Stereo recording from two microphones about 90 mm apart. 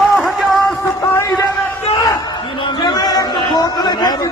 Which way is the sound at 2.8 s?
45° left (ahead or behind).